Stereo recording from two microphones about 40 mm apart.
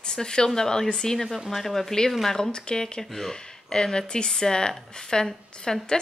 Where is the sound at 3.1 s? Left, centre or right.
Centre.